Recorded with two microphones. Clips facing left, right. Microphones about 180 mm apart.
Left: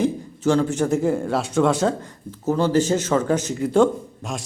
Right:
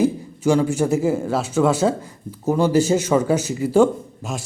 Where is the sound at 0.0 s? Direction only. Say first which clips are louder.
Right 2 dB; 10° right (ahead or behind).